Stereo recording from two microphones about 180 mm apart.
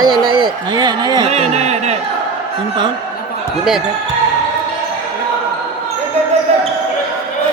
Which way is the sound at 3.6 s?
Centre (ahead or behind).